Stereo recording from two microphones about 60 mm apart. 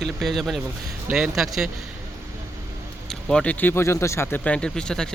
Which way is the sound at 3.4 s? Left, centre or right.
Left.